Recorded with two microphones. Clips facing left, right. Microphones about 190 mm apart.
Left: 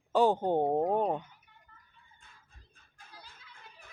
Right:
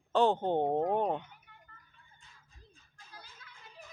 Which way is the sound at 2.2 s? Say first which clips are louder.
Right 1 dB; 60° left (ahead or behind).